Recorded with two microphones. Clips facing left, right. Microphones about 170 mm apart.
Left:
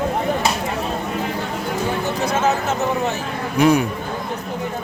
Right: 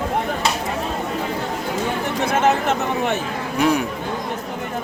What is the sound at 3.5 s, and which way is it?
Speech, centre (ahead or behind).